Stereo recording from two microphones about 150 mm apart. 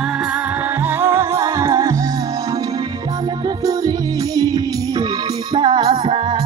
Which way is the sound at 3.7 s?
25° right (ahead or behind).